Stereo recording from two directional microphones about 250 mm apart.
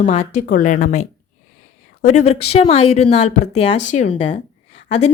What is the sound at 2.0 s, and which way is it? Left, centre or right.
A woman's voice, left.